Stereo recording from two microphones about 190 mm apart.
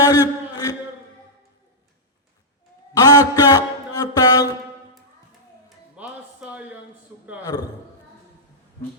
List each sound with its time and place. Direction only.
0.0 s a sound: 20° left (ahead or behind)
3.0 s a man's voice: 20° left (ahead or behind)
5.6 s music: 5° right (ahead or behind)
7.4 s a man's voice: 20° left (ahead or behind)